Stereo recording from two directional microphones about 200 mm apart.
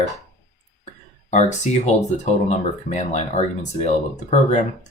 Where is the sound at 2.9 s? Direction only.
35° left (ahead or behind).